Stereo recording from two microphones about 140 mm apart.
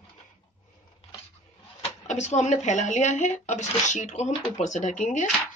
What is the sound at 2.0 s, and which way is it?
A woman's voice, 55° left (ahead or behind).